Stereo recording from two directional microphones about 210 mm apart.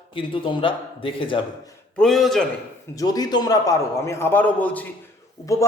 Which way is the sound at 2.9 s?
15° left (ahead or behind).